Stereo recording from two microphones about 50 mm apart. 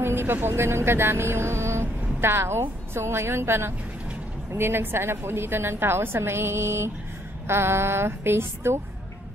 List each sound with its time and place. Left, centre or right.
0.0 s a woman's voice: right